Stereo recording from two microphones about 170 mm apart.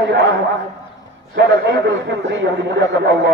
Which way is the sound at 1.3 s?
90° right.